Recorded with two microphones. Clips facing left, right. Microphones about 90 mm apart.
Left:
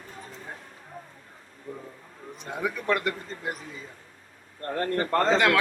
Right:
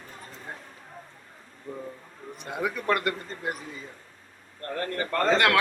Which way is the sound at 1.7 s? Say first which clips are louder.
Right 2 dB; centre (ahead or behind).